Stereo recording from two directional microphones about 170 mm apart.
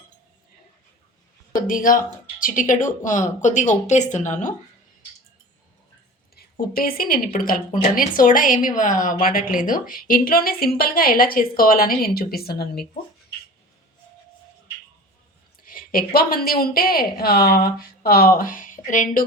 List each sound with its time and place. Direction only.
1.5 s speech: 55° left (ahead or behind)
6.3 s a woman's voice: 65° left (ahead or behind)
15.6 s a woman's voice: 55° left (ahead or behind)